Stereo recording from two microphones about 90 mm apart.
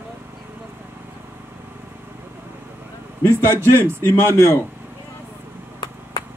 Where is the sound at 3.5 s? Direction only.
25° right (ahead or behind).